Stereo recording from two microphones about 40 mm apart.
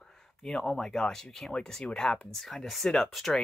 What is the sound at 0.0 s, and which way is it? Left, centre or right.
Speech, centre.